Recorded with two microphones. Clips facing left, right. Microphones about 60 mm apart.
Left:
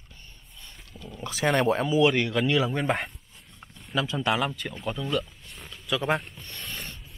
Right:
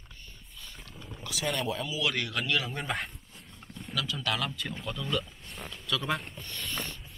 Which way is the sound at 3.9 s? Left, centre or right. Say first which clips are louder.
Left 7 dB; left.